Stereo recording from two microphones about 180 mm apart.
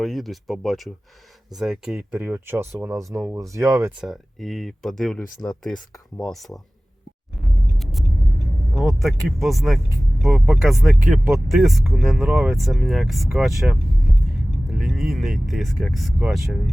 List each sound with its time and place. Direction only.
0.0 s speech: centre (ahead or behind); by 3.9 s 15° right (ahead or behind)
4.0 s speech: centre (ahead or behind)
7.4 s a sound: centre (ahead or behind)
8.7 s speech: centre (ahead or behind)